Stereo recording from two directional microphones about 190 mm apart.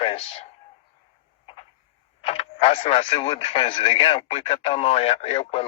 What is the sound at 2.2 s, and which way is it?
Speech, 30° left (ahead or behind).